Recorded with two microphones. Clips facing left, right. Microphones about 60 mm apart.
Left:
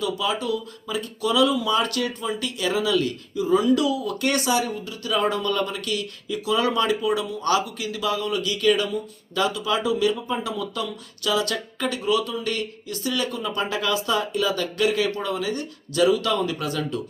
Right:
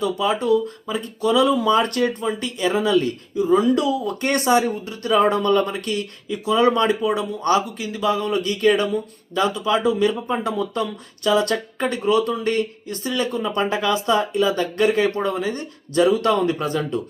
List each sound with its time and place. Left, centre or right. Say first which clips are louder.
0.3 s speech: right 7 dB; right
2.2 s speech: right 4 dB; right
2.7 s speech: right 3 dB; right
4.4 s speech: right 5 dB; right
7.4 s speech: right 4 dB; right
9.3 s speech: right 3 dB; right
10.3 s speech: right 5 dB; right
11.2 s speech: right 5 dB; right
14.8 s speech: right 4 dB; right
16.0 s speech: right 2 dB; right
16.6 s speech: right 4 dB; right